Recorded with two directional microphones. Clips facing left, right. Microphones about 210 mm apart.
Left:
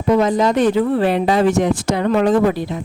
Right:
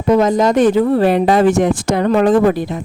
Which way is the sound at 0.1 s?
45° right (ahead or behind).